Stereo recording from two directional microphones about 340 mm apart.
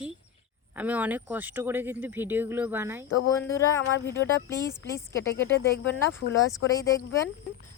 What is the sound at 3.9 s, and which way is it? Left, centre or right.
Speech, left.